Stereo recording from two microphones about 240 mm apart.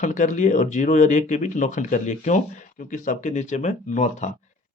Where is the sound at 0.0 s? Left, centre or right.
Left.